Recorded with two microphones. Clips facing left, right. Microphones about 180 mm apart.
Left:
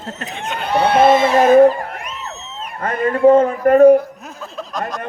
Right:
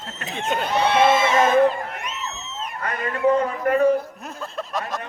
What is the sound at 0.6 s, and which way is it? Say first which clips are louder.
Speech: left 6 dB; 55° left (ahead or behind).